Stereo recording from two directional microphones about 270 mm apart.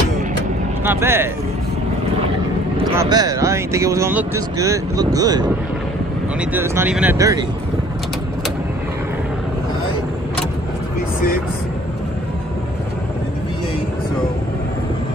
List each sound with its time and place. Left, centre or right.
0.8 s speech: centre
3.0 s speech: centre
6.5 s speech: centre
11.1 s vehicle: left